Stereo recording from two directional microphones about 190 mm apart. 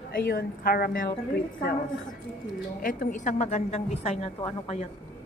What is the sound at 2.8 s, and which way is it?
A woman's voice, 45° left (ahead or behind).